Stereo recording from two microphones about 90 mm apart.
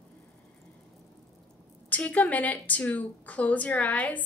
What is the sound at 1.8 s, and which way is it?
A woman's voice, 15° left (ahead or behind).